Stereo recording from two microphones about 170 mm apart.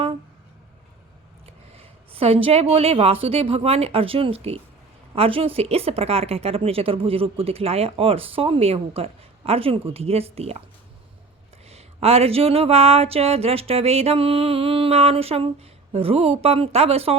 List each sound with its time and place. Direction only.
1.5 s a woman's voice: 35° right (ahead or behind)
11.7 s a woman's voice: 35° right (ahead or behind)